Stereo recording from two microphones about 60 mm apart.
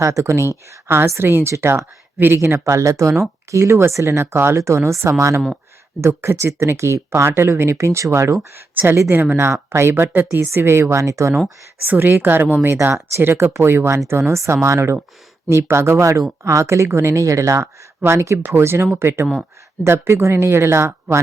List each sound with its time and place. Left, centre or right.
0.0 s speech: right
1.3 s speech: right
2.6 s speech: right
8.7 s a woman's voice: right
11.9 s speech: right
18.0 s speech: right